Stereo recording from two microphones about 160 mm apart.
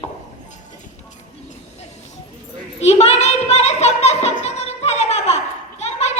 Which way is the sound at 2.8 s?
45° left (ahead or behind).